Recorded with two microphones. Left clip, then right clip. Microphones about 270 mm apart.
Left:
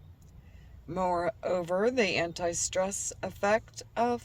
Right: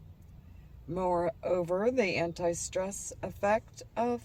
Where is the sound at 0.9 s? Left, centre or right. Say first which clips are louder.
Left 1 dB; centre.